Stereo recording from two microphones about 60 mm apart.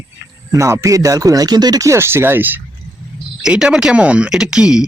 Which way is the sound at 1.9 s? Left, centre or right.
Right.